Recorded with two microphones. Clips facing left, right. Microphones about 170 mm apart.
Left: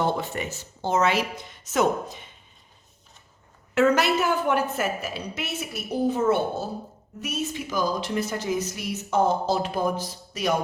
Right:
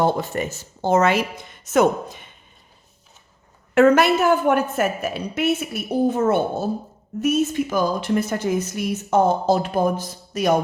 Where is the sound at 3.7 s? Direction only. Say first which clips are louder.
Right 6 dB; 55° right (ahead or behind).